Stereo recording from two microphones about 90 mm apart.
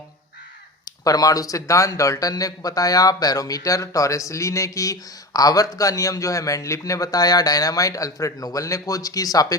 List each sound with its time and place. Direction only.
0.9 s speech: 45° left (ahead or behind)